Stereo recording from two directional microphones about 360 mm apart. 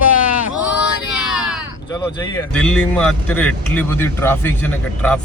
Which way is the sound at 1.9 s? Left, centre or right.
Centre.